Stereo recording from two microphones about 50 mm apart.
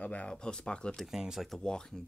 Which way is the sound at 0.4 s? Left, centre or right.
Centre.